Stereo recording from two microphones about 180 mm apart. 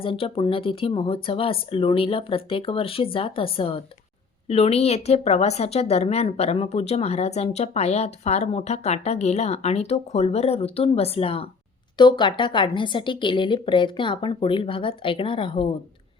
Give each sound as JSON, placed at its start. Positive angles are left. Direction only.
{"t": 0.0, "sound": "a woman's voice", "side_deg": 30}